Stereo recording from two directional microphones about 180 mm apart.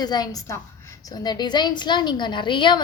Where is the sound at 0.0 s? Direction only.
20° left (ahead or behind).